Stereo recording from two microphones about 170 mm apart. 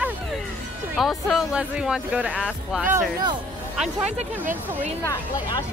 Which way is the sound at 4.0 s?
40° right (ahead or behind).